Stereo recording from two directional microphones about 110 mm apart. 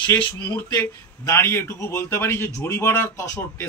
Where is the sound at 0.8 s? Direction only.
25° left (ahead or behind).